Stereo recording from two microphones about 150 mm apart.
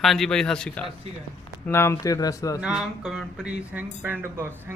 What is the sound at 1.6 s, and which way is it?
Speech, 15° left (ahead or behind).